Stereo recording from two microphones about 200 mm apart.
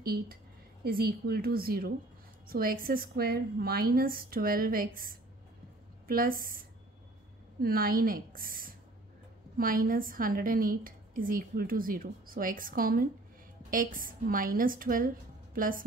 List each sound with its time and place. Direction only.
0.0 s a woman's voice: 50° right (ahead or behind)
7.6 s a woman's voice: 45° right (ahead or behind)